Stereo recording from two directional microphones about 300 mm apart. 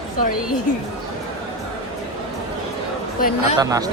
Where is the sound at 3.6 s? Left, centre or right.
Centre.